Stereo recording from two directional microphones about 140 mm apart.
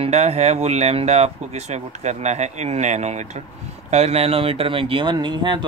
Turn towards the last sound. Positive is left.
turn(degrees=-35)  # may be behind; listen again after turning